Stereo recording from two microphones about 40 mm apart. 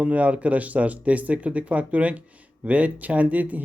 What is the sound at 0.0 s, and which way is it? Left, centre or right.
Speech, right.